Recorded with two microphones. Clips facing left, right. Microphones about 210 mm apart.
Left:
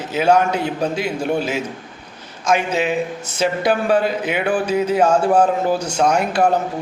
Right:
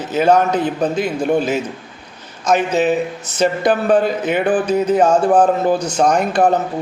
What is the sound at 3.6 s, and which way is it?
Speech, 10° left (ahead or behind).